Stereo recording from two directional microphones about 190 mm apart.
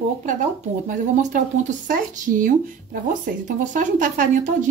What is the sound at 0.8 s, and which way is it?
Speech, 40° right (ahead or behind).